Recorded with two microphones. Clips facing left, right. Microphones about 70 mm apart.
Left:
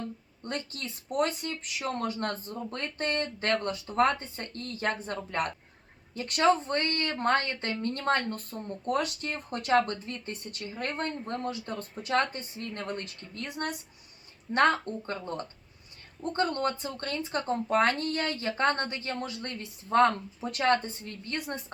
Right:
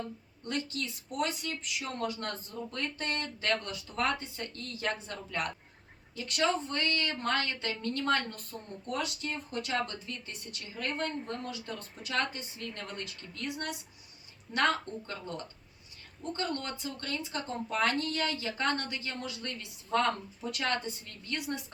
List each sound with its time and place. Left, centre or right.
0.4 s a woman's voice: left